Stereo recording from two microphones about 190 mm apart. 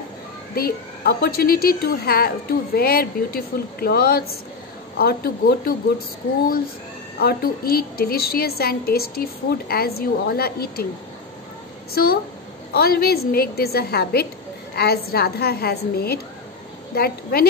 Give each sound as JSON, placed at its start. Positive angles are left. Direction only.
{"t": 0.6, "sound": "a woman's voice", "side_deg": 55}
{"t": 7.2, "sound": "a woman's voice", "side_deg": 50}
{"t": 11.9, "sound": "a woman's voice", "side_deg": 50}